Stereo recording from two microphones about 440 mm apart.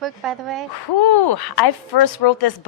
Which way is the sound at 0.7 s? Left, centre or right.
Left.